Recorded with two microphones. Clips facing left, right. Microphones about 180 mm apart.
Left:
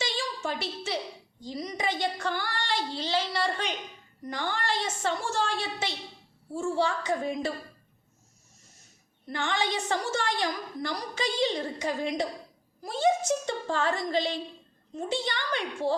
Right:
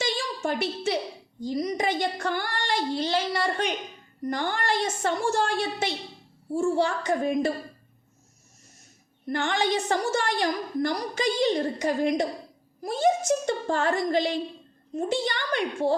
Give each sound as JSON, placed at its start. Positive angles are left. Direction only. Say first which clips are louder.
{"t": 0.0, "sound": "a sound", "louder": "right 4 dB", "side_deg": -50}
{"t": 1.4, "sound": "a woman's voice", "louder": "right 7 dB", "side_deg": -45}
{"t": 9.3, "sound": "a woman's voice", "louder": "right 4 dB", "side_deg": -50}